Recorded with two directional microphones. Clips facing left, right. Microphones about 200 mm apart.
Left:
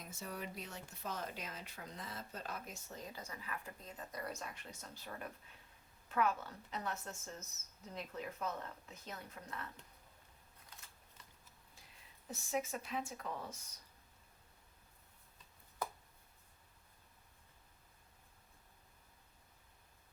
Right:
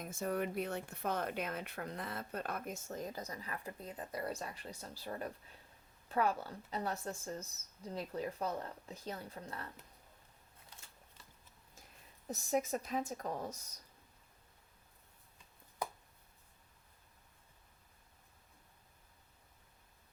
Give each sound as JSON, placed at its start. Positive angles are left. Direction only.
{"t": 0.0, "sound": "a woman's voice", "side_deg": -50}
{"t": 12.3, "sound": "a woman's voice", "side_deg": -40}